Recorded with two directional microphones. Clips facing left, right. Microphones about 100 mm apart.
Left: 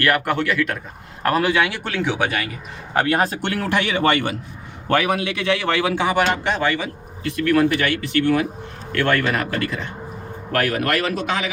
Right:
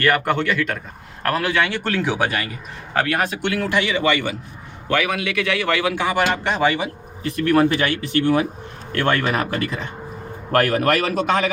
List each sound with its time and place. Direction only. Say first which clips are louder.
0.0 s a man's voice: right 1 dB; centre (ahead or behind)
1.2 s a man's voice: left 2 dB; 15° left (ahead or behind); by 2.5 s centre (ahead or behind)
2.9 s speech: left 2 dB; 25° left (ahead or behind); by 4.2 s 50° left (ahead or behind)
4.9 s a man's voice: left 2 dB; 35° left (ahead or behind); by 6.4 s 15° left (ahead or behind)
6.6 s a man's voice: right 2 dB; 20° right (ahead or behind)